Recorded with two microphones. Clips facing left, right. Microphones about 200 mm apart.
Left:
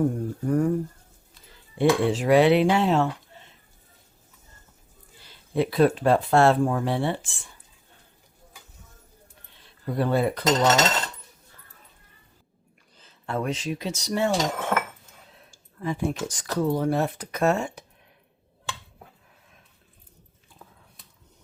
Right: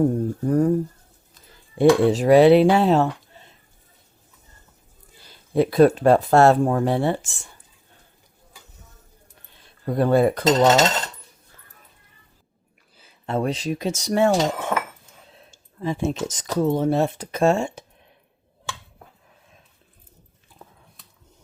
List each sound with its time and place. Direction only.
0.0 s speech: 35° right (ahead or behind)
1.8 s speech: 40° right (ahead or behind)
5.5 s speech: 45° right (ahead or behind)
9.8 s speech: 45° right (ahead or behind)
10.4 s speech: 25° right (ahead or behind)
13.2 s speech: 30° right (ahead or behind); by 14.3 s 50° right (ahead or behind)
15.4 s speech: 25° right (ahead or behind)